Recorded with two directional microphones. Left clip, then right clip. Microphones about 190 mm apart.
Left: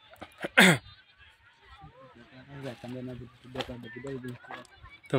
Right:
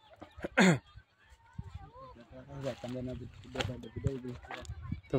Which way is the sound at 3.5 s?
20° left (ahead or behind).